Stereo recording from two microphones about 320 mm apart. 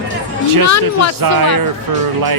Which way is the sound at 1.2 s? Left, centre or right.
Right.